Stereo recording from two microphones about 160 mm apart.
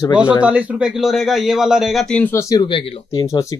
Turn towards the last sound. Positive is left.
turn(degrees=20)  # may be behind; listen again after turning